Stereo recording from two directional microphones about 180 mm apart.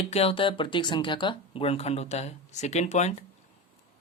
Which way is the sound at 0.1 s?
35° left (ahead or behind).